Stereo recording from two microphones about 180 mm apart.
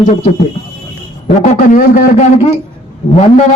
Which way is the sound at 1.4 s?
45° left (ahead or behind).